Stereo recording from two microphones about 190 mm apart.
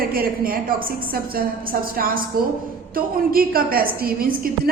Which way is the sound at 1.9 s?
50° right (ahead or behind).